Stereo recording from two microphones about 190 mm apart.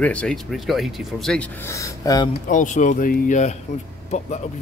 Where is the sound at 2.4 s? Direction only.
40° left (ahead or behind).